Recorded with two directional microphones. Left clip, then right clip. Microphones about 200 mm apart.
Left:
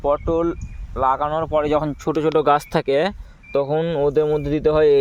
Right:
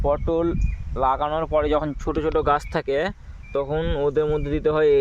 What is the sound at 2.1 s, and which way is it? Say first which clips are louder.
Speech: left 4 dB; 40° left (ahead or behind).